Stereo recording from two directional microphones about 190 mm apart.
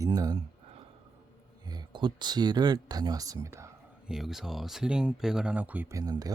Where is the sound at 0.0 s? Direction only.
20° right (ahead or behind).